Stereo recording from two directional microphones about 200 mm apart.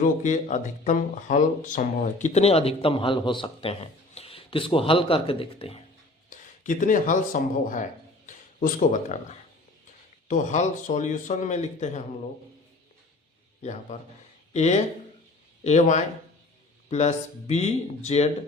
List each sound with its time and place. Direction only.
0.0 s speech: 35° left (ahead or behind)
6.3 s speech: 40° left (ahead or behind)
10.2 s speech: 40° left (ahead or behind)
13.6 s speech: 35° left (ahead or behind)